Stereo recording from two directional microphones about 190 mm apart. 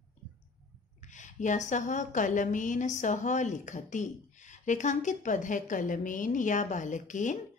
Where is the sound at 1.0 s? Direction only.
40° left (ahead or behind).